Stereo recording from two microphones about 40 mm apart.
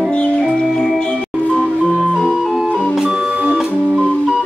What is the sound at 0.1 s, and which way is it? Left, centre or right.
Music, left.